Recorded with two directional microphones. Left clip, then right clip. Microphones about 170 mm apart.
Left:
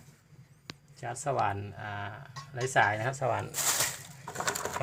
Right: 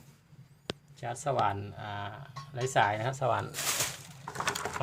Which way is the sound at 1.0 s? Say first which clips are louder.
Right 1 dB; 5° right (ahead or behind).